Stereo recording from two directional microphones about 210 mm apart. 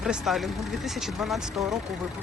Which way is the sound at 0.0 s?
Centre (ahead or behind).